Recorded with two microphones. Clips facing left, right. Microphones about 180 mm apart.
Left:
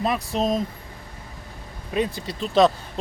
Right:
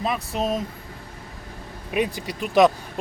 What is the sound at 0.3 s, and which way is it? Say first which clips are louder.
Speech: left 2 dB; 5° right (ahead or behind).